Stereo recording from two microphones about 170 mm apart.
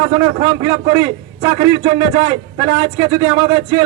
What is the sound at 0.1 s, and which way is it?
A man's voice, 30° right (ahead or behind).